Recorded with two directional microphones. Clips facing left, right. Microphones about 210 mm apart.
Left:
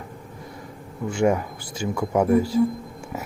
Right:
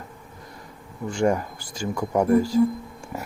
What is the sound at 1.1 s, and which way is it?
Speech, 5° left (ahead or behind).